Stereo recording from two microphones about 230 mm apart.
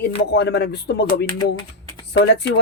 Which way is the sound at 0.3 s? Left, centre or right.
Left.